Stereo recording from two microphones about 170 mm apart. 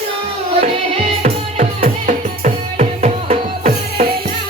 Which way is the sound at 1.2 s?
40° right (ahead or behind).